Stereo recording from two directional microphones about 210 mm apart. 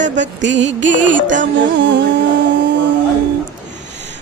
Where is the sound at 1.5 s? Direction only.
60° right (ahead or behind).